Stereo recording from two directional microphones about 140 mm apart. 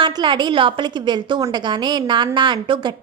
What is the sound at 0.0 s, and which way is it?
A woman's voice, 35° right (ahead or behind).